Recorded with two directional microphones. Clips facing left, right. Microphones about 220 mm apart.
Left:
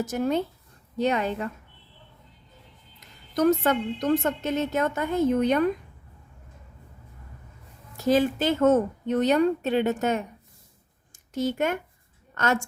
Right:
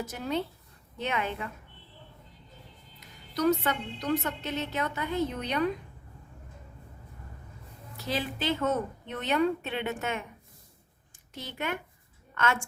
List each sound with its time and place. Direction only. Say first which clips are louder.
0.0 s a woman's voice: left 7 dB; 45° left (ahead or behind)
3.0 s a woman's voice: left 5 dB; 45° left (ahead or behind)
7.9 s a woman's voice: left 11 dB; 45° left (ahead or behind)